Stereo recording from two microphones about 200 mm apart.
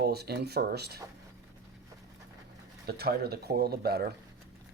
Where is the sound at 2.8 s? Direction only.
55° right (ahead or behind).